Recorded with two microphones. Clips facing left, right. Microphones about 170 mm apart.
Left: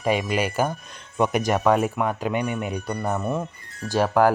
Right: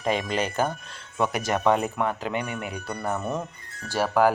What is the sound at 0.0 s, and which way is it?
Speech, 15° left (ahead or behind).